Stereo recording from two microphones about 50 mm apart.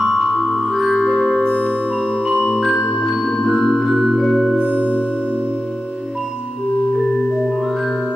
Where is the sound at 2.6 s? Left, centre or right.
Centre.